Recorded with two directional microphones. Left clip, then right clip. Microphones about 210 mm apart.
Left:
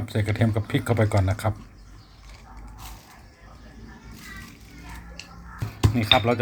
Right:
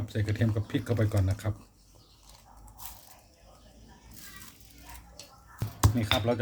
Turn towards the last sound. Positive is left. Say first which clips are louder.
# left 8 dB
turn(degrees=5)  # may be behind; listen again after turning